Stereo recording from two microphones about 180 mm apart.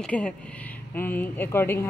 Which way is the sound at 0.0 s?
5° left (ahead or behind).